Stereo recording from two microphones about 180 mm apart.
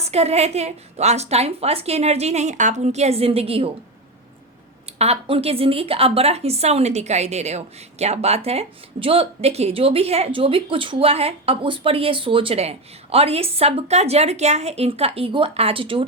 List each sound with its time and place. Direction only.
0.0 s a woman's voice: 35° right (ahead or behind)
4.9 s a woman's voice: 35° right (ahead or behind)